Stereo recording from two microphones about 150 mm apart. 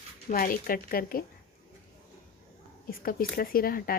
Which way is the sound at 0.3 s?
70° left (ahead or behind).